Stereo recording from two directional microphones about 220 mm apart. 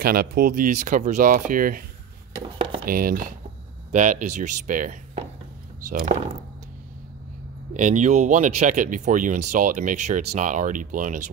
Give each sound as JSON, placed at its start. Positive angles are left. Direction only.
{"t": 0.0, "sound": "speech", "side_deg": -45}
{"t": 2.4, "sound": "speech", "side_deg": -25}
{"t": 2.8, "sound": "speech", "side_deg": -40}
{"t": 7.7, "sound": "speech", "side_deg": -35}